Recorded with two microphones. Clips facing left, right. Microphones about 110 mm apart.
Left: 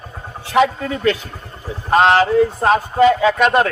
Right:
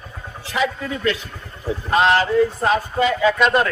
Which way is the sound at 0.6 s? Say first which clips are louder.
Left 2 dB; 50° left (ahead or behind).